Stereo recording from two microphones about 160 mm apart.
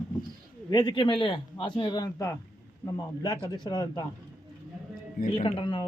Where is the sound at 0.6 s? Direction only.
25° left (ahead or behind).